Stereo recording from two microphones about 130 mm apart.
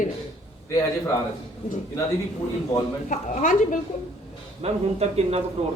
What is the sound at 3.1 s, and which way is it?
Speech, 80° left.